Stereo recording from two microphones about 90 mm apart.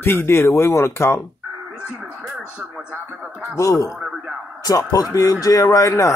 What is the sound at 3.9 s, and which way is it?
Speech, 5° right (ahead or behind).